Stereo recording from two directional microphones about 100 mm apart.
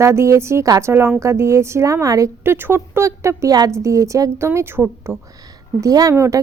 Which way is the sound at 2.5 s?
20° right (ahead or behind).